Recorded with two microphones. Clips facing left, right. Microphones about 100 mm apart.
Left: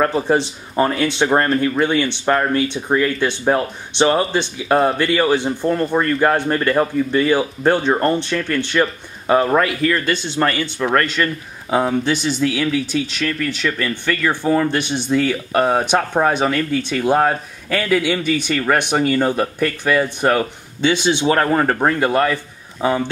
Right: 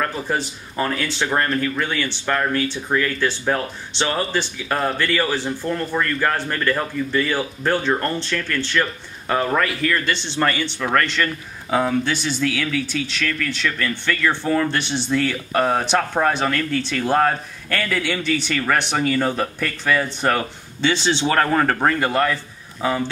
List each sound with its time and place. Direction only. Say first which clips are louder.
0.0 s speech: left 7 dB; 25° left (ahead or behind)
10.1 s speech: left 3 dB; 10° left (ahead or behind)
11.7 s speech: left 2 dB; 20° left (ahead or behind)